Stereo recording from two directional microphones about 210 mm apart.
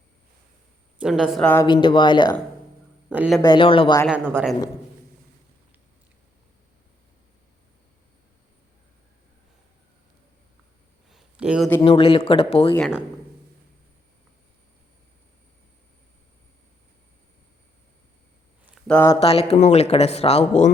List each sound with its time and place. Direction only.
0.9 s a woman's voice: 5° right (ahead or behind)
1.6 s speech: 20° left (ahead or behind)
3.1 s a woman's voice: 5° right (ahead or behind)
3.4 s speech: 25° left (ahead or behind)
4.0 s a woman's voice: 5° right (ahead or behind)
11.1 s a sound: 5° right (ahead or behind)
11.8 s speech: 25° left (ahead or behind)
12.7 s speech: 10° left (ahead or behind)
18.9 s speech: 10° left (ahead or behind)
19.2 s speech: 30° left (ahead or behind)